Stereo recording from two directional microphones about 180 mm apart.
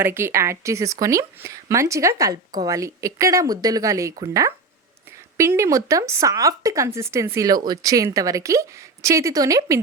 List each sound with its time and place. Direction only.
0.0 s speech: 15° right (ahead or behind)